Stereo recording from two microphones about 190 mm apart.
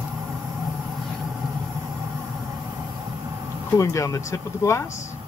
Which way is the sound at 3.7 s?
15° left (ahead or behind).